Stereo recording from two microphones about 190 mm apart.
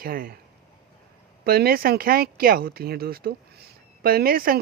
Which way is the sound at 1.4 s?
55° right (ahead or behind).